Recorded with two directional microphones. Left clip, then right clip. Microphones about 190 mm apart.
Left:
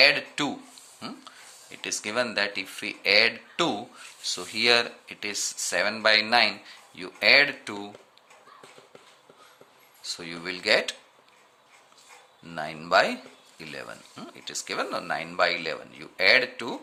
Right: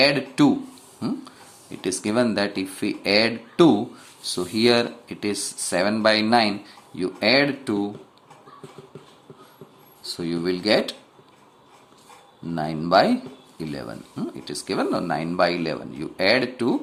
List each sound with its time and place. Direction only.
0.0 s speech: 10° left (ahead or behind)
10.0 s speech: 15° left (ahead or behind)
12.5 s speech: 15° left (ahead or behind)